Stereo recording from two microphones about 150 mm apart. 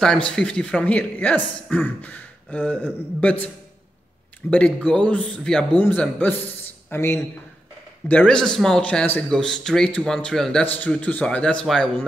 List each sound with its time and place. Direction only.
0.0 s speech: 5° left (ahead or behind)
4.5 s speech: 10° left (ahead or behind)